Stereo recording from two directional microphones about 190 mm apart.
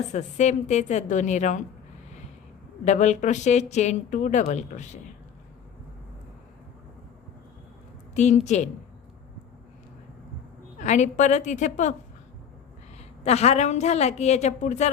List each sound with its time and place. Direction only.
0.1 s a woman's voice: 35° left (ahead or behind)
2.8 s a woman's voice: 40° left (ahead or behind)
8.1 s a woman's voice: 40° left (ahead or behind)
10.8 s a woman's voice: 40° left (ahead or behind)
13.0 s a woman's voice: 35° left (ahead or behind)